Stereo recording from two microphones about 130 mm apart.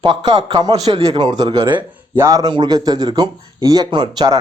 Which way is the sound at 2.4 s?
35° right (ahead or behind).